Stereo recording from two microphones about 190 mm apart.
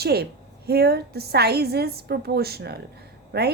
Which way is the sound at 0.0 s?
60° right (ahead or behind).